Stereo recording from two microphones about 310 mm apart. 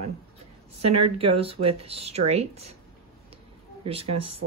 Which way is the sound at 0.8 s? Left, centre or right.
Right.